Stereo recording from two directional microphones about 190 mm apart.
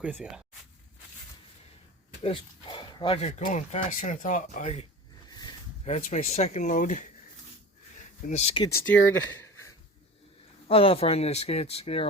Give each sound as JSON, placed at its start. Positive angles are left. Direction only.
{"t": 0.0, "sound": "speech", "side_deg": -5}
{"t": 2.2, "sound": "speech", "side_deg": 25}
{"t": 5.3, "sound": "a sound", "side_deg": 20}
{"t": 5.8, "sound": "speech", "side_deg": 35}
{"t": 8.3, "sound": "speech", "side_deg": 30}
{"t": 8.6, "sound": "speech", "side_deg": 15}
{"t": 10.7, "sound": "speech", "side_deg": 30}